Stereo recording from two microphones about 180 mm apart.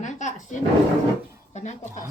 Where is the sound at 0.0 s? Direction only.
45° left (ahead or behind).